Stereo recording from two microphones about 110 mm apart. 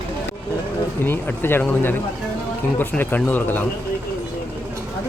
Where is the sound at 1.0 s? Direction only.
20° left (ahead or behind).